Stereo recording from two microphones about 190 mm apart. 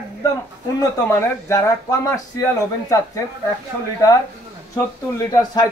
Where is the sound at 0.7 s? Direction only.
15° left (ahead or behind).